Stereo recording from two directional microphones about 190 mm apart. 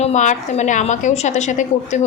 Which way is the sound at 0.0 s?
40° left (ahead or behind).